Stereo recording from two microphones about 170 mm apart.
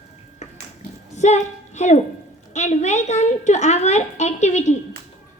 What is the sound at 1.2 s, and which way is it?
A woman's voice, 45° left (ahead or behind).